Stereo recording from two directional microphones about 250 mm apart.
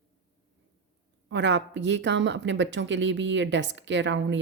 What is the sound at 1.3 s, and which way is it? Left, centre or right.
Speech, right.